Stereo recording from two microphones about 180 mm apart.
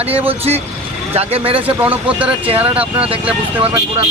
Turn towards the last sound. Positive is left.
turn(degrees=-5)  # may be behind; listen again after turning